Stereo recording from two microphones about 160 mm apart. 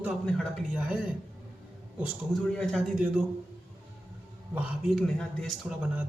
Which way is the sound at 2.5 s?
5° left (ahead or behind).